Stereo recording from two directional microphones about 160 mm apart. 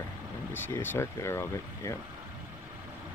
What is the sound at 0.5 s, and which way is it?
Speech, 15° left (ahead or behind).